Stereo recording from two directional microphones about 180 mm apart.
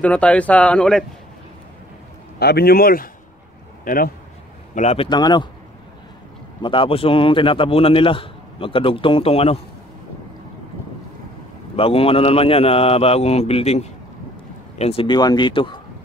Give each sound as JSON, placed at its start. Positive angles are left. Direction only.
{"t": 0.0, "sound": "speech", "side_deg": 5}
{"t": 2.3, "sound": "a man's voice", "side_deg": 65}
{"t": 4.7, "sound": "a man's voice", "side_deg": 35}
{"t": 6.6, "sound": "a man's voice", "side_deg": 30}
{"t": 11.7, "sound": "a man's voice", "side_deg": 30}